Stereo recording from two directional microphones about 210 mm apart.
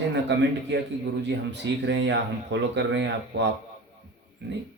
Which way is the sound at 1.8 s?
55° right (ahead or behind).